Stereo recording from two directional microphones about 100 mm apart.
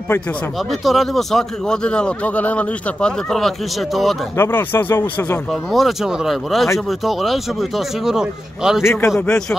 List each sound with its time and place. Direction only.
0.7 s a man's voice: centre (ahead or behind)
4.4 s speech: 20° left (ahead or behind)
5.5 s speech: centre (ahead or behind)
8.8 s speech: 25° left (ahead or behind)